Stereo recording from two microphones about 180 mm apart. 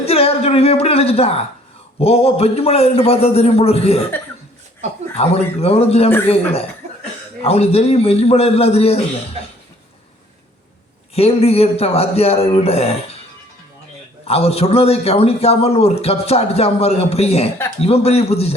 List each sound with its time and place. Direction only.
0.0 s a sound: 35° left (ahead or behind)
2.0 s a man's voice: 35° left (ahead or behind)
5.1 s a man's voice: 35° left (ahead or behind)
11.1 s a man's voice: 35° left (ahead or behind)
14.3 s a man's voice: 35° left (ahead or behind)